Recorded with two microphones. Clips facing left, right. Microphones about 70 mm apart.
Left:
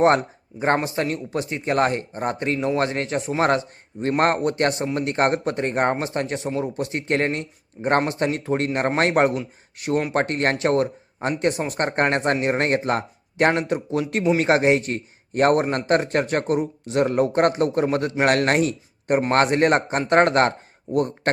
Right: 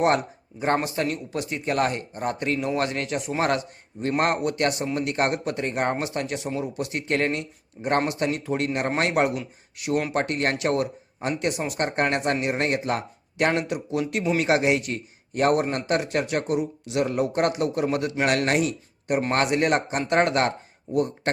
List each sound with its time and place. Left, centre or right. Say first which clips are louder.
0.5 s speech: left 4 dB; centre
0.9 s a man's voice: left 2 dB; left